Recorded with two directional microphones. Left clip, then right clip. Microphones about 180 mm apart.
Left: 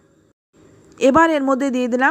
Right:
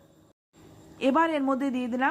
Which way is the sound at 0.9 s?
35° left (ahead or behind).